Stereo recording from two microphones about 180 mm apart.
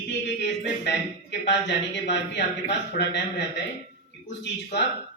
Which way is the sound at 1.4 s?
75° left (ahead or behind).